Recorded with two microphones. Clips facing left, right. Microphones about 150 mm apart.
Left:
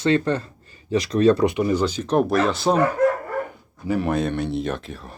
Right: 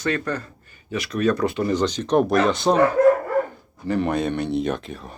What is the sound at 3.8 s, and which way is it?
Speech, 5° left (ahead or behind).